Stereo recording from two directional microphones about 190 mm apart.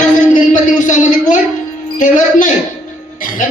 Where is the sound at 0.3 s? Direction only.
45° left (ahead or behind).